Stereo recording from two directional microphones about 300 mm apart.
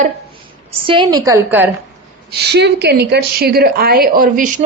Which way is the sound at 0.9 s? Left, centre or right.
Centre.